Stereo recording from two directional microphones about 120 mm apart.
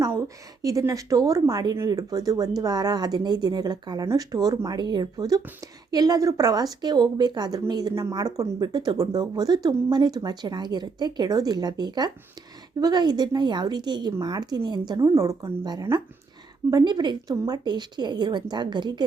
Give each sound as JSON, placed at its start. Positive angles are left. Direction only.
{"t": 0.6, "sound": "speech", "side_deg": -30}